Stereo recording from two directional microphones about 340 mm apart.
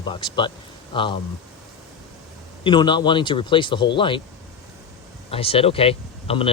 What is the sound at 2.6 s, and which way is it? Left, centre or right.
Speech, centre.